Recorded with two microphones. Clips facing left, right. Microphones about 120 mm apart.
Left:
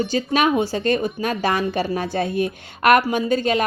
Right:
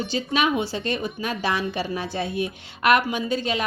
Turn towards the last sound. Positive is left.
turn(degrees=50)  # may be behind; listen again after turning